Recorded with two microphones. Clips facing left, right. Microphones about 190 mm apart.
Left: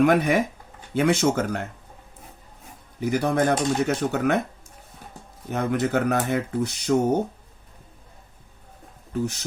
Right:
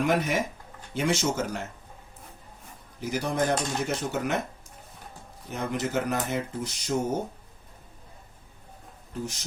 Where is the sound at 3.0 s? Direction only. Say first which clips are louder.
Left 6 dB; 65° left (ahead or behind).